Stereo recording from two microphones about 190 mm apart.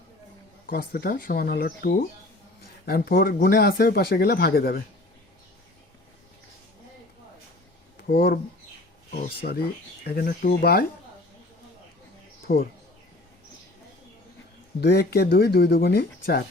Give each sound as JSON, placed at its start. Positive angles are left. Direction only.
{"t": 0.7, "sound": "speech", "side_deg": 50}
{"t": 8.0, "sound": "speech", "side_deg": 50}
{"t": 12.4, "sound": "bird", "side_deg": 50}
{"t": 14.8, "sound": "speech", "side_deg": 60}